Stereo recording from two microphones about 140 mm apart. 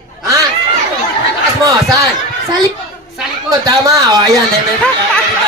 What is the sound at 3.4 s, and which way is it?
Speech, 25° right (ahead or behind).